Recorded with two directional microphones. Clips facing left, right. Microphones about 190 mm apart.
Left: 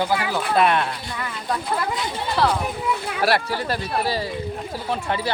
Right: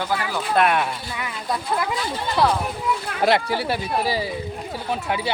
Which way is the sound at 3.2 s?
20° right (ahead or behind).